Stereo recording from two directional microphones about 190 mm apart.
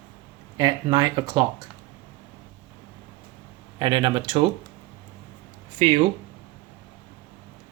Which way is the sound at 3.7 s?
25° right (ahead or behind).